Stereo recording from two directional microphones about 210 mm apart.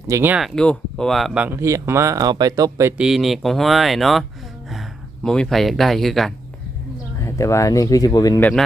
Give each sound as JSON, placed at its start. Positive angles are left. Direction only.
{"t": 0.1, "sound": "speech", "side_deg": -10}
{"t": 3.0, "sound": "speech", "side_deg": 0}
{"t": 7.2, "sound": "speech", "side_deg": 15}